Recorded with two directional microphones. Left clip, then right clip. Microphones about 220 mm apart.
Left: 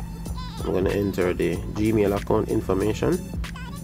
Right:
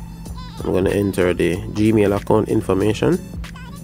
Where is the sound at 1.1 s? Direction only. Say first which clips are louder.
Right 6 dB; 30° right (ahead or behind).